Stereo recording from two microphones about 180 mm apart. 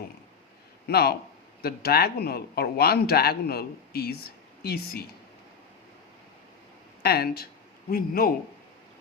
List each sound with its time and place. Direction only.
0.9 s speech: 60° left (ahead or behind)
7.0 s speech: 60° left (ahead or behind)